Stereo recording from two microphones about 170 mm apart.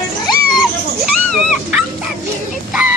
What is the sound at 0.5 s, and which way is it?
Dog, centre (ahead or behind).